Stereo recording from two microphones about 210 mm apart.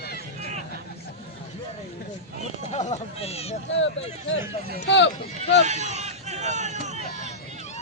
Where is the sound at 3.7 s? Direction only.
60° left (ahead or behind).